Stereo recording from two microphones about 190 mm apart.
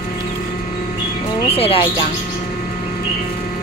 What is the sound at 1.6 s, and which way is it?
Speech, 30° left (ahead or behind).